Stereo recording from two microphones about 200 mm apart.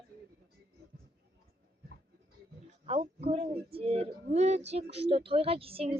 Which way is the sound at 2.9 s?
30° right (ahead or behind).